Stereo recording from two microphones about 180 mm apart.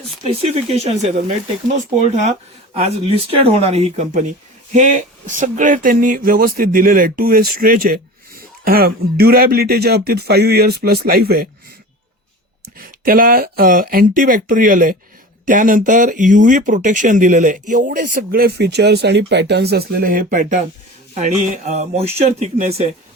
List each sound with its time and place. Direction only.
0.2 s speech: 35° right (ahead or behind); by 11.4 s 55° right (ahead or behind)
12.8 s speech: 50° right (ahead or behind); by 22.8 s 35° right (ahead or behind)